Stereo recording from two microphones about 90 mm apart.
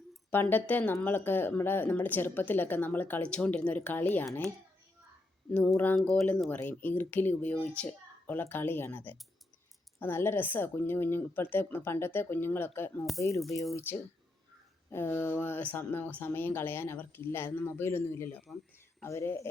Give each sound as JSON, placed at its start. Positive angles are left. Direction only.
{"t": 0.3, "sound": "speech", "side_deg": 20}
{"t": 5.5, "sound": "speech", "side_deg": 15}
{"t": 6.0, "sound": "speech", "side_deg": 0}
{"t": 6.5, "sound": "speech", "side_deg": 20}
{"t": 13.1, "sound": "speech", "side_deg": 35}
{"t": 13.7, "sound": "speech", "side_deg": 25}